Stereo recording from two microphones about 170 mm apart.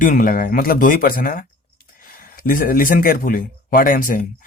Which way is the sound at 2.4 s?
60° left (ahead or behind).